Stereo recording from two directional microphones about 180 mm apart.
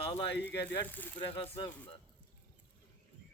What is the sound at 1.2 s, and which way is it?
Speech, 30° left (ahead or behind).